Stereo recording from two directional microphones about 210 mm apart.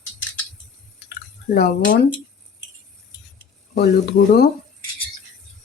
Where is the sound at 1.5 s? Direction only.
50° left (ahead or behind).